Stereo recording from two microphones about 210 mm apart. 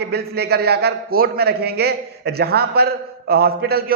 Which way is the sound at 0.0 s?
50° right (ahead or behind).